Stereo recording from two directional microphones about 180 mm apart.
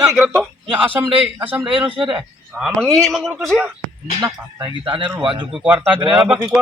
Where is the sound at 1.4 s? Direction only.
10° right (ahead or behind).